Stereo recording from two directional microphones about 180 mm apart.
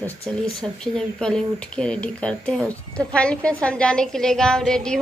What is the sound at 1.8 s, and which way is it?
A woman's voice, 5° left (ahead or behind).